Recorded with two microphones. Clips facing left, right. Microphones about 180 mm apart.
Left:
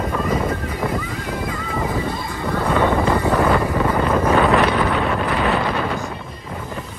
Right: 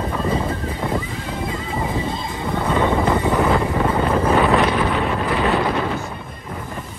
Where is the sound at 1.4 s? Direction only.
25° right (ahead or behind).